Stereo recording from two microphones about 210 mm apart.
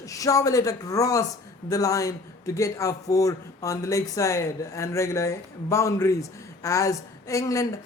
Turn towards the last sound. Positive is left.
turn(degrees=15)  # may be behind; listen again after turning